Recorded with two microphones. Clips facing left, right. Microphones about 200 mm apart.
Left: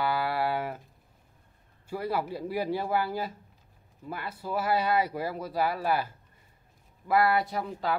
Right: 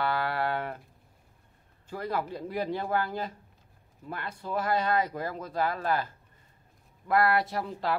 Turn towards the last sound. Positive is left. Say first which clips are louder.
# even
turn(degrees=0)  # may be behind; listen again after turning